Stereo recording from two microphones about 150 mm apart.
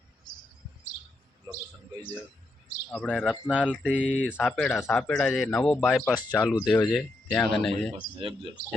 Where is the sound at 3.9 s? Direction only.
10° right (ahead or behind).